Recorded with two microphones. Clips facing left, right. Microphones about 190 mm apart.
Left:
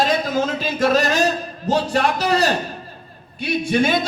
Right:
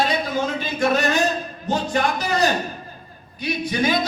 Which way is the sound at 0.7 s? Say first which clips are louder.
Left 2 dB; 35° left (ahead or behind).